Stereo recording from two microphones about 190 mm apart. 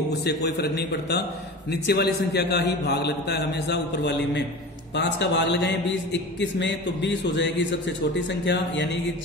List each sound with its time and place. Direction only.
0.1 s a man's voice: 60° left (ahead or behind)